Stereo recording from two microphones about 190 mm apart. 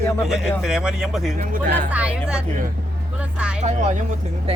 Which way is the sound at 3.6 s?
40° right (ahead or behind).